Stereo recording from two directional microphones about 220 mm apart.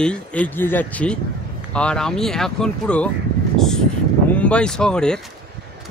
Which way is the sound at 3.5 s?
Centre (ahead or behind).